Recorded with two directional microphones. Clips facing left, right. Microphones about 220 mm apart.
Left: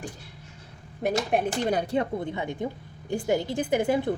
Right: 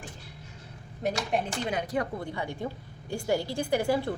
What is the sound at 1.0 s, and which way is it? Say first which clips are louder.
Speech: left 4 dB; 55° left (ahead or behind).